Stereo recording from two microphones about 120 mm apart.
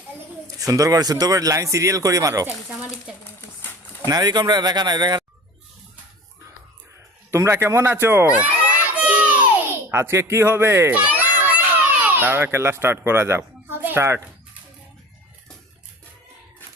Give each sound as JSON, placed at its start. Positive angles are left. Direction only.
{"t": 0.4, "sound": "speech", "side_deg": -30}
{"t": 3.4, "sound": "a sound", "side_deg": 20}
{"t": 4.1, "sound": "a man's voice", "side_deg": -35}
{"t": 7.3, "sound": "speech", "side_deg": -20}
{"t": 8.3, "sound": "crowd", "side_deg": -10}
{"t": 9.9, "sound": "a child's voice", "side_deg": -20}